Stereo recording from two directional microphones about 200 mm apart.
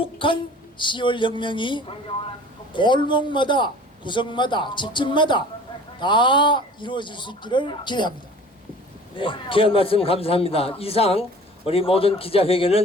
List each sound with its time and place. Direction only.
0.0 s a woman's voice: 25° left (ahead or behind)
9.1 s a man's voice: 25° left (ahead or behind)